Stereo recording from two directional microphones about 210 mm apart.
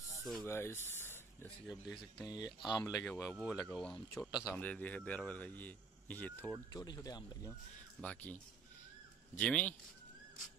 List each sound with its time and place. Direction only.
0.5 s speech: 10° left (ahead or behind)
2.2 s speech: 20° left (ahead or behind); by 4.6 s 5° right (ahead or behind)
4.6 s speech: 5° left (ahead or behind)
8.0 s speech: 5° left (ahead or behind)
9.4 s speech: 5° left (ahead or behind)